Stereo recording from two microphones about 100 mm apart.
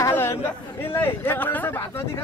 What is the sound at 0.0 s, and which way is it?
Chatter, 25° left (ahead or behind).